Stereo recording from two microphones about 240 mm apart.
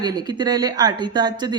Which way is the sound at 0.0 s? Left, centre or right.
Centre.